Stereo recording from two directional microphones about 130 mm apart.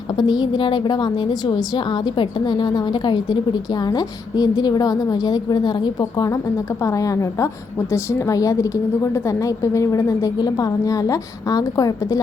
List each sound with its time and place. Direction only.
0.2 s a woman's voice: 35° left (ahead or behind)